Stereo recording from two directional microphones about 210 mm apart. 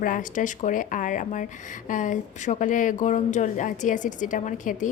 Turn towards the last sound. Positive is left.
turn(degrees=35)  # may be behind; listen again after turning